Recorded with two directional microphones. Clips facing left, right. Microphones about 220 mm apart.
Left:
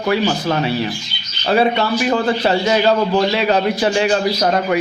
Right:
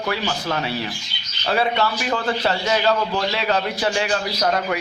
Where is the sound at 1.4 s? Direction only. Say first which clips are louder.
Left 5 dB; 20° left (ahead or behind).